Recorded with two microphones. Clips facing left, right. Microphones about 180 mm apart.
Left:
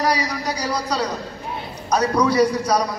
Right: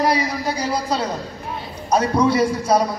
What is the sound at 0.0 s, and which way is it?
A man's voice, 25° right (ahead or behind).